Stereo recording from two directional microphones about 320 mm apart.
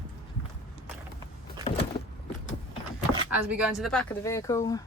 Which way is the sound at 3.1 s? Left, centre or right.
Centre.